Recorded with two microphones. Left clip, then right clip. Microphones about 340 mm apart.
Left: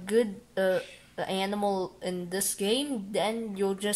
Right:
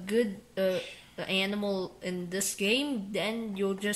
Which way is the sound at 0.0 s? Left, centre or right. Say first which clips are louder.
Left 3 dB; left.